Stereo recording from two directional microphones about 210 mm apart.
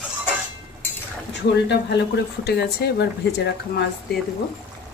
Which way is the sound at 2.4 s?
50° left (ahead or behind).